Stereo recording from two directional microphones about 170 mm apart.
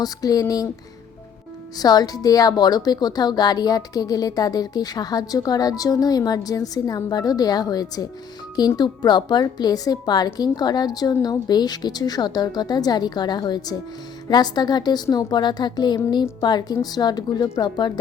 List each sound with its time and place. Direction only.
0.0 s a woman's voice: 20° left (ahead or behind)
1.8 s a woman's voice: 25° left (ahead or behind)